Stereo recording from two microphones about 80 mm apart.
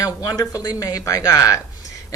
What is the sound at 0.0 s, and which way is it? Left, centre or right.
A woman's voice, left.